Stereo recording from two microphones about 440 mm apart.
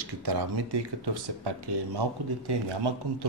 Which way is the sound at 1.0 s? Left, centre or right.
Right.